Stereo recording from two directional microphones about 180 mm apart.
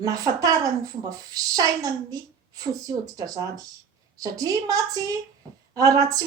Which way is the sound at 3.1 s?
20° right (ahead or behind).